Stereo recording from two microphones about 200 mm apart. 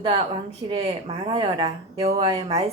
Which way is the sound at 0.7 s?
25° right (ahead or behind).